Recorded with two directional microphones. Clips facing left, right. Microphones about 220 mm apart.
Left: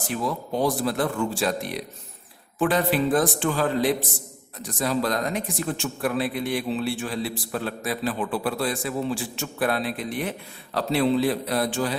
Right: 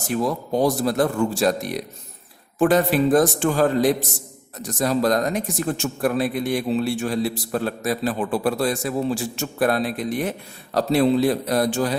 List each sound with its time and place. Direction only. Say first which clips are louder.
0.1 s a man's voice: right 5 dB; 40° right (ahead or behind)